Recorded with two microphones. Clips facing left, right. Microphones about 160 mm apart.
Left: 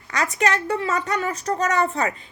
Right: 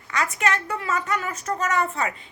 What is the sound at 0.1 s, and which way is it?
A woman's voice, 35° left (ahead or behind).